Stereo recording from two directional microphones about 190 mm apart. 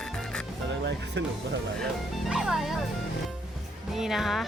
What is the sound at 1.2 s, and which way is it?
Speech, 65° right (ahead or behind).